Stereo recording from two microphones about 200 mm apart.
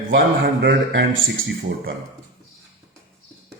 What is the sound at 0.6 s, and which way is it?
Speech, 60° right (ahead or behind).